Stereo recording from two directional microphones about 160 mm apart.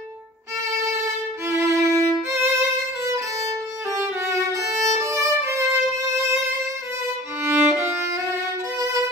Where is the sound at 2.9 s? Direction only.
20° right (ahead or behind).